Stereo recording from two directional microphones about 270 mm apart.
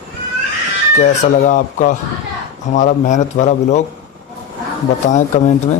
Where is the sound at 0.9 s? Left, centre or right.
Left.